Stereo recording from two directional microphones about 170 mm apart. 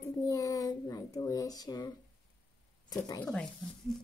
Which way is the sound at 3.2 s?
5° left (ahead or behind).